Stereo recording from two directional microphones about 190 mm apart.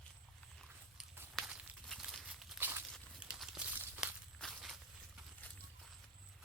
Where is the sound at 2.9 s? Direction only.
Centre (ahead or behind).